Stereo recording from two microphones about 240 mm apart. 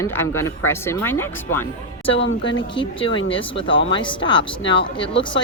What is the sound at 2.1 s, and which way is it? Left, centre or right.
Speech, left.